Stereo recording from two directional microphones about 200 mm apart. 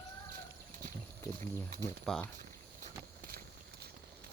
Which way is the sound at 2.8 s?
45° right (ahead or behind).